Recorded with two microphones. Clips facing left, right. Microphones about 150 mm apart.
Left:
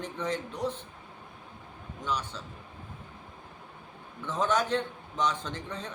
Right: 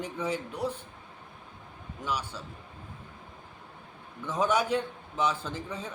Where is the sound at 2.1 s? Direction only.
10° right (ahead or behind).